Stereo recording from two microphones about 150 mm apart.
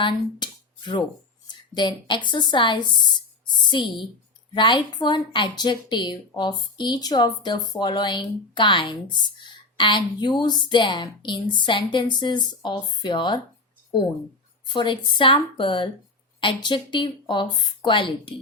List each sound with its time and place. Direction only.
0.0 s a woman's voice: 30° left (ahead or behind)
14.7 s speech: 30° left (ahead or behind)